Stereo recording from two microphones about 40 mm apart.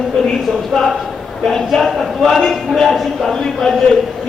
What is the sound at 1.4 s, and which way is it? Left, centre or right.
A man's voice, centre.